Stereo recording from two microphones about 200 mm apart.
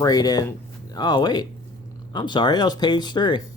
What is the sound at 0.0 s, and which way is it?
Speech, 20° left (ahead or behind).